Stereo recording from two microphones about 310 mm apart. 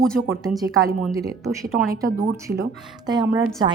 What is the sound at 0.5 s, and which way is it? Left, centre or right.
A woman's voice, centre.